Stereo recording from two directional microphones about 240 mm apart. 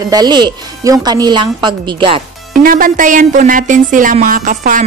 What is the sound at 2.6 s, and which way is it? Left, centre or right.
Speech, right.